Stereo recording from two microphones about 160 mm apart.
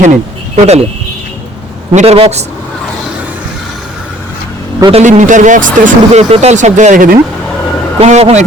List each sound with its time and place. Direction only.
0.0 s speech: 45° right (ahead or behind)
1.9 s a man's voice: 40° right (ahead or behind)
4.9 s speech: 45° right (ahead or behind)
7.9 s speech: 45° right (ahead or behind)